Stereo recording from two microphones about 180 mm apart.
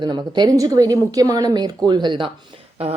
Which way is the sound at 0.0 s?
25° right (ahead or behind).